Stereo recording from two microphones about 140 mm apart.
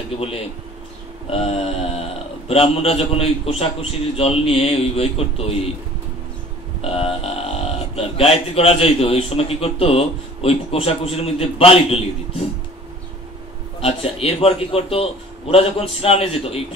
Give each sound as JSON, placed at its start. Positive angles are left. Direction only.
{"t": 1.3, "sound": "speech", "side_deg": 45}
{"t": 6.8, "sound": "speech", "side_deg": 45}
{"t": 13.7, "sound": "speech", "side_deg": 45}